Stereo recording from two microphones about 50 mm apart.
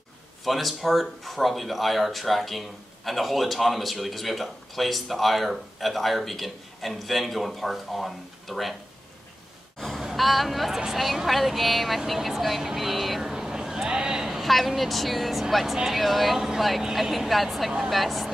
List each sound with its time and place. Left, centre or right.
0.5 s a man's voice: centre
9.8 s a sound: centre
10.0 s a man's voice: centre